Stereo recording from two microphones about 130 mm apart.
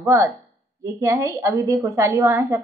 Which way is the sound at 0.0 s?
20° right (ahead or behind).